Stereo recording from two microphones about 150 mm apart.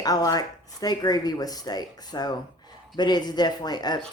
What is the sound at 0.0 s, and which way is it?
Speech, 25° left (ahead or behind).